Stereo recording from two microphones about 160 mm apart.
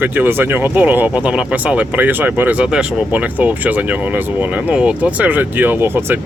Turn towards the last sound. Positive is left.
turn(degrees=-15)  # may be behind; listen again after turning